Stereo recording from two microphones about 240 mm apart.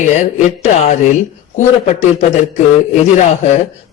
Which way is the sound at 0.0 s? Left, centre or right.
Left.